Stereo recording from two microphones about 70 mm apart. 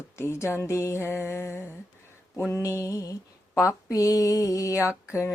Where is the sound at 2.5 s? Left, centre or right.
Left.